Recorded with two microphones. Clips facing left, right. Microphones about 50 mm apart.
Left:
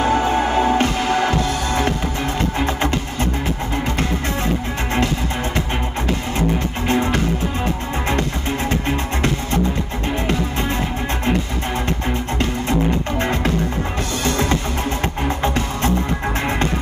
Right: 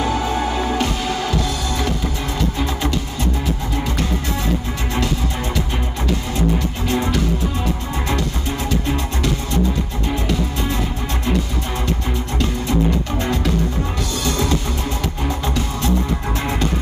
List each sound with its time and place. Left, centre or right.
0.0 s music: left
6.9 s music: left
13.2 s music: left